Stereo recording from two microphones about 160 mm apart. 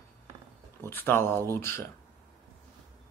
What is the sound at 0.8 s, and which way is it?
Speech, 15° left (ahead or behind).